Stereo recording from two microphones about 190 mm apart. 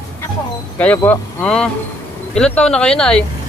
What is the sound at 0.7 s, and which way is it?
Speech, 10° left (ahead or behind).